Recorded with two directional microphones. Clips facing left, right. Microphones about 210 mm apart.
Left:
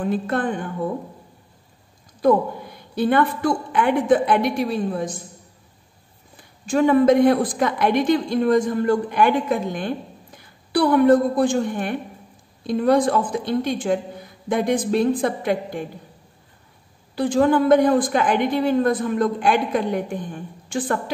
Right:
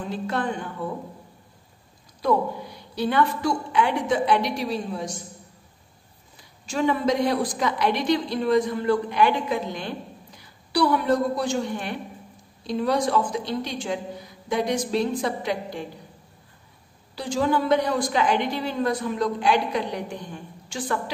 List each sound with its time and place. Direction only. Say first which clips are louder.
0.0 s a woman's voice: left 5 dB; 55° left (ahead or behind)
2.2 s a woman's voice: left 5 dB; 55° left (ahead or behind)
6.6 s a woman's voice: left 7 dB; 55° left (ahead or behind)
17.1 s a woman's voice: left 6 dB; 55° left (ahead or behind)